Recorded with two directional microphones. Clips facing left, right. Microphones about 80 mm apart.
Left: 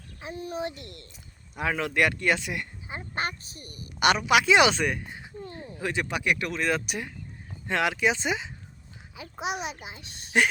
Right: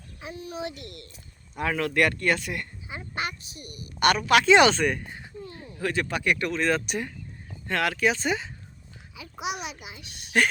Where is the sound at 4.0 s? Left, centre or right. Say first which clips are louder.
Right 1 dB; centre.